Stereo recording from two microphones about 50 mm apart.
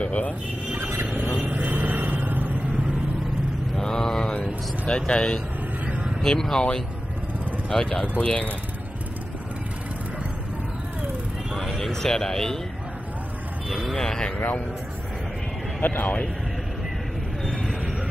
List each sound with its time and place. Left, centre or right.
0.0 s speech: left
0.7 s vehicle: right
3.7 s mantra: centre
4.3 s speech: left
5.9 s vehicle: right
6.2 s speech: centre
11.7 s speech: centre
13.9 s speech: centre
15.8 s speech: left